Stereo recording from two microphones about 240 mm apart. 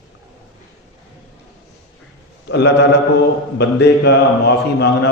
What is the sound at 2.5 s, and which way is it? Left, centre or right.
A man's voice, left.